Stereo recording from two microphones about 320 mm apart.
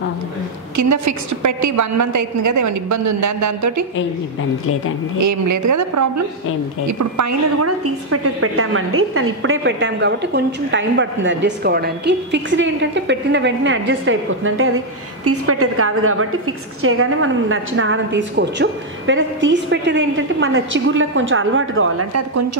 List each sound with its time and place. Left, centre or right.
0.7 s a woman's voice: right
5.2 s a woman's voice: right